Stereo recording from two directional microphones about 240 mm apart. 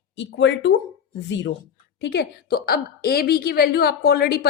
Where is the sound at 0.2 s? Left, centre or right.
Left.